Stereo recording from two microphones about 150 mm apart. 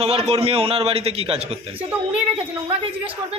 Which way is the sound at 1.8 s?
10° right (ahead or behind).